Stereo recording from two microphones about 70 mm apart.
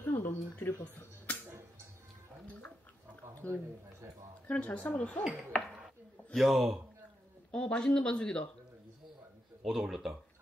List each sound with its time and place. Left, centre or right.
0.0 s camera: left
3.4 s speech: centre
6.3 s a man's voice: centre
7.5 s speech: centre
9.7 s a man's voice: centre